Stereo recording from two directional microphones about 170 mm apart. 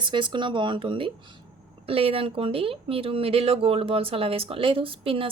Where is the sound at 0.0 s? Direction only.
30° right (ahead or behind).